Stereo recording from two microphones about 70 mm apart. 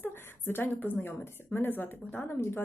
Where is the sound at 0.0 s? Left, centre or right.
Left.